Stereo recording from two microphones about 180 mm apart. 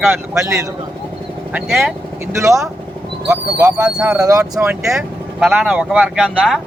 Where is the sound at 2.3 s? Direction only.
15° right (ahead or behind).